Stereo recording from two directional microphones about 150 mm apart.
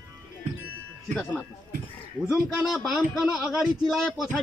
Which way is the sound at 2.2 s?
5° right (ahead or behind).